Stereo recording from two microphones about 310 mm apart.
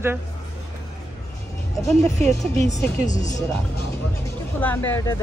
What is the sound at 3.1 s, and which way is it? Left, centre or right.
Speech, left.